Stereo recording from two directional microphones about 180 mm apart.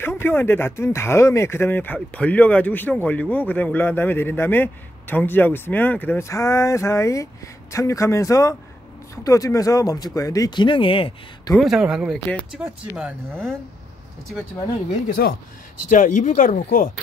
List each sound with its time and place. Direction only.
0.0 s speech: 10° left (ahead or behind); by 11.5 s 30° left (ahead or behind)
11.6 s speech: 5° right (ahead or behind)
13.3 s speech: 5° left (ahead or behind)
15.2 s speech: 65° left (ahead or behind)
15.9 s speech: 45° left (ahead or behind)